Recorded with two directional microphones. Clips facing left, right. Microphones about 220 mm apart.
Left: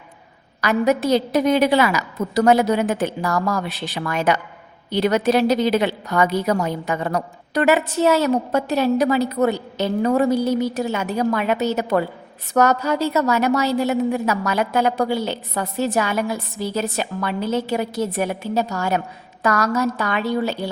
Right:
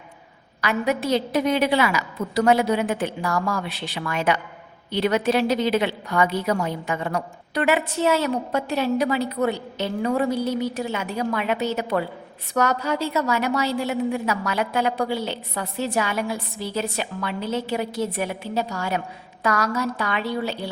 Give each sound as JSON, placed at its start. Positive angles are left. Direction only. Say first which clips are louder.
{"t": 0.6, "sound": "a woman's voice", "louder": "left 5 dB", "side_deg": 40}